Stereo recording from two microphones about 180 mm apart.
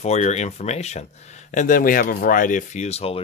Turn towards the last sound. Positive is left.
turn(degrees=35)  # may be behind; listen again after turning